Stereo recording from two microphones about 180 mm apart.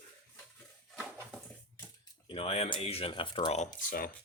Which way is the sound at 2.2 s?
30° left (ahead or behind).